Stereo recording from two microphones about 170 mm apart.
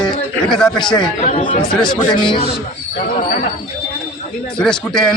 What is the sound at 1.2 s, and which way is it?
Speech, 40° left (ahead or behind).